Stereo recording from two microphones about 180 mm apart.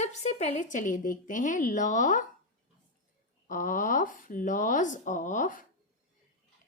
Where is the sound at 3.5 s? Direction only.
45° left (ahead or behind).